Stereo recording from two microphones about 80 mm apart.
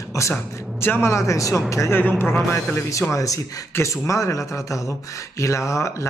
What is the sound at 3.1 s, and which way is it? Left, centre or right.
Speech, left.